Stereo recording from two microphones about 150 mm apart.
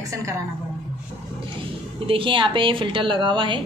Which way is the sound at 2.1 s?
35° right (ahead or behind).